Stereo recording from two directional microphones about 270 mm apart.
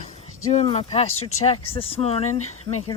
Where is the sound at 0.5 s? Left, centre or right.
Left.